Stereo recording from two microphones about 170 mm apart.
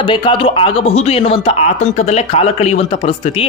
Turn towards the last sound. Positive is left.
turn(degrees=35)  # may be behind; listen again after turning